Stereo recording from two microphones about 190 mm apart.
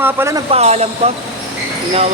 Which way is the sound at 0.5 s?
35° right (ahead or behind).